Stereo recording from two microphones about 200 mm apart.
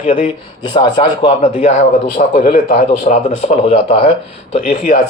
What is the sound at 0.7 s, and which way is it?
Speech, 25° left (ahead or behind).